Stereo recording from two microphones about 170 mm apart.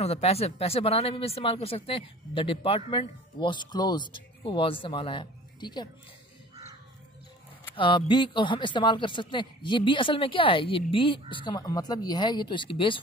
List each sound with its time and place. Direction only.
0.0 s speech: 35° left (ahead or behind)
7.7 s speech: 30° left (ahead or behind)